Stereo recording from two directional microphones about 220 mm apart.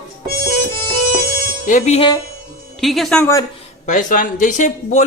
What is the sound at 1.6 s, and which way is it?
Speech, 35° left (ahead or behind).